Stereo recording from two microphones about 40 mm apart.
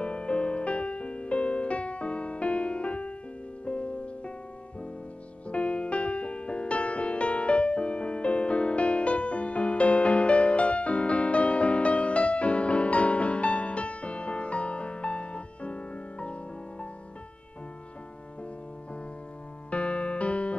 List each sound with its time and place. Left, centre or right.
0.0 s music: left
5.5 s music: left
19.7 s piano: left